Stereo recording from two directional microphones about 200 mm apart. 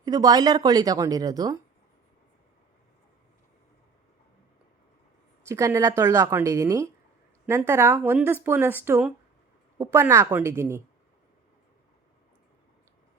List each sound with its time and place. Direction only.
0.0 s speech: 20° right (ahead or behind)
5.5 s a woman's voice: 15° right (ahead or behind)